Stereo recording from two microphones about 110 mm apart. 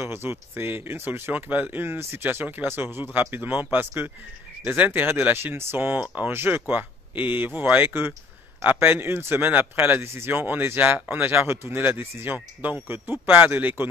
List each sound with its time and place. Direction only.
0.0 s speech: 20° right (ahead or behind)